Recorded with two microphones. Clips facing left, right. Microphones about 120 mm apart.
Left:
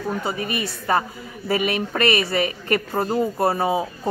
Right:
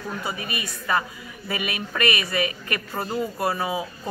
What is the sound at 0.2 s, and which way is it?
Speech, 30° left (ahead or behind).